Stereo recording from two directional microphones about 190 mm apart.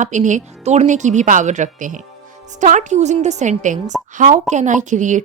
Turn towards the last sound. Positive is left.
turn(degrees=-40)  # may be behind; listen again after turning